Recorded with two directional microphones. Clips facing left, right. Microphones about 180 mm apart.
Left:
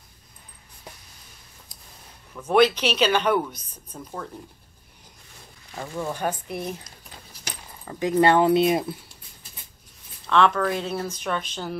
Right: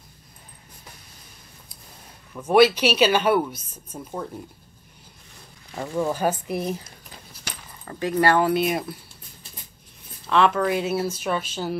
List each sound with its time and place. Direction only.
2.3 s speech: 10° right (ahead or behind)
5.8 s speech: 5° right (ahead or behind)
7.8 s speech: 10° left (ahead or behind)
8.1 s speech: 20° left (ahead or behind)
10.2 s speech: 5° right (ahead or behind)